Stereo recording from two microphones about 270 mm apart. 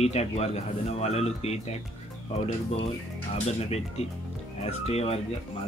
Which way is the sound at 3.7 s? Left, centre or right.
Left.